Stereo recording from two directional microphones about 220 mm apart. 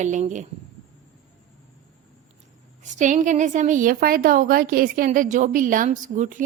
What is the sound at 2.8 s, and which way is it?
A woman's voice, 35° right (ahead or behind).